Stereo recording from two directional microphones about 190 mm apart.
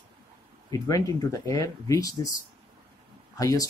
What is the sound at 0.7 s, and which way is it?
Speech, 20° left (ahead or behind).